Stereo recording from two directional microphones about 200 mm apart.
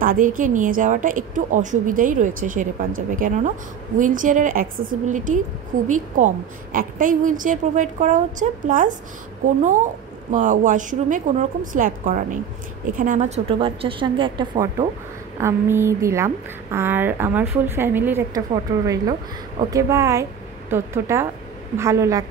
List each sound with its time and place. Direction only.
0.0 s a woman's voice: 45° right (ahead or behind); by 22.2 s 15° right (ahead or behind)